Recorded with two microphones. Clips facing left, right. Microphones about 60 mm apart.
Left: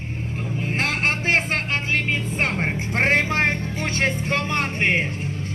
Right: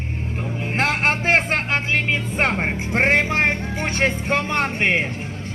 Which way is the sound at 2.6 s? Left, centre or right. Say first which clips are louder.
Right 2 dB; centre.